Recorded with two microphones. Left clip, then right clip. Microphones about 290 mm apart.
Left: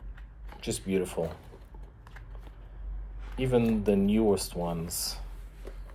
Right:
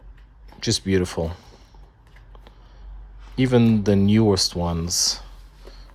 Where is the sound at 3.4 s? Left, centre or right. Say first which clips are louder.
Right 7 dB; right.